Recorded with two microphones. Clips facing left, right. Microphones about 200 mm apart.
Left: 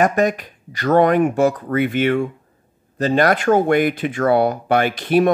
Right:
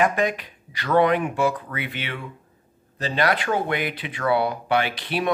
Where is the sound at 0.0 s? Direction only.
45° left (ahead or behind).